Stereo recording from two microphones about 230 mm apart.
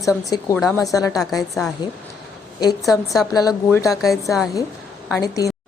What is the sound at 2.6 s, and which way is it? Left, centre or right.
Speech, centre.